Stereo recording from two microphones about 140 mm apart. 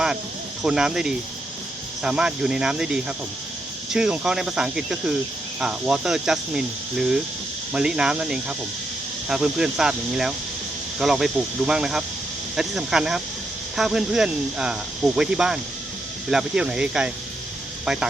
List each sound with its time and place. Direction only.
0.6 s speech: 5° right (ahead or behind)